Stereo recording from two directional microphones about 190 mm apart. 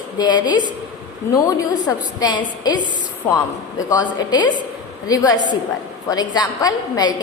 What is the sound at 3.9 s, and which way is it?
Speech, 20° left (ahead or behind).